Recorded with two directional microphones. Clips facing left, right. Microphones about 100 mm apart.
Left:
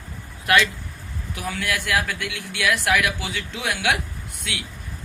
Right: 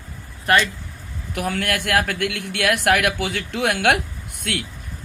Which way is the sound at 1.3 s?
55° right (ahead or behind).